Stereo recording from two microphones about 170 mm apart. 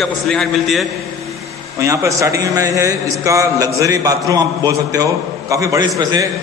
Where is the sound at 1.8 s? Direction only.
20° right (ahead or behind).